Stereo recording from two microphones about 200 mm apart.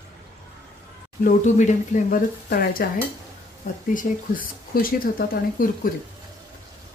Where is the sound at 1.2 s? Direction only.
40° left (ahead or behind).